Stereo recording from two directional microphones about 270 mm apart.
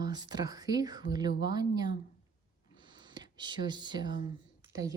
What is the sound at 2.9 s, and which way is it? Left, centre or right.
Speech, centre.